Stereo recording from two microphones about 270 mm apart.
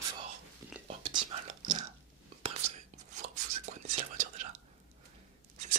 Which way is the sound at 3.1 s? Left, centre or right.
Right.